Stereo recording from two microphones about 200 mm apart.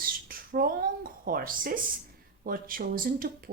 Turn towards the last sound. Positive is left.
turn(degrees=-45)  # may be behind; listen again after turning